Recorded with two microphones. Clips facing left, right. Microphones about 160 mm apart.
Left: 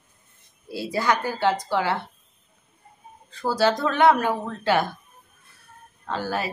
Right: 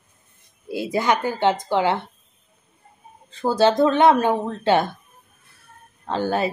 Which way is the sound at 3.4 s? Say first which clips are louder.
Right 5 dB; 25° right (ahead or behind).